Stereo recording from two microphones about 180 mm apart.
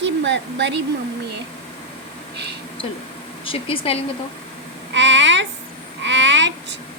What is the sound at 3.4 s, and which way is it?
Speech, 30° left (ahead or behind).